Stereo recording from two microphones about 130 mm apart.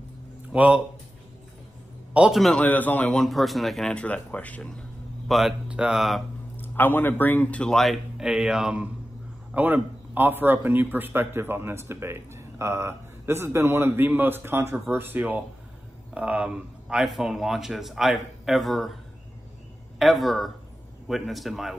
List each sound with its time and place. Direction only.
0.5 s speech: 10° right (ahead or behind)
2.1 s speech: 5° right (ahead or behind)
2.6 s speech: 15° left (ahead or behind)
5.3 s speech: 5° right (ahead or behind)
6.5 s speech: 15° left (ahead or behind); by 8.8 s 5° right (ahead or behind)
9.5 s a man's voice: 15° right (ahead or behind)
20.0 s speech: centre (ahead or behind)